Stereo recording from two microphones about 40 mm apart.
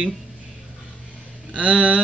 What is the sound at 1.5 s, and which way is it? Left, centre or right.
Speech, right.